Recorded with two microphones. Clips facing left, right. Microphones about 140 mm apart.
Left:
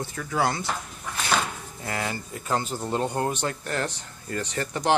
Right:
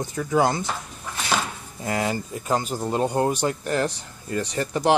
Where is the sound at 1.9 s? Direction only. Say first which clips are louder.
Right 6 dB; 20° right (ahead or behind).